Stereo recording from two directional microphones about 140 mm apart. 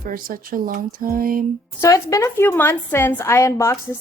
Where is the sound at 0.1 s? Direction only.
90° right.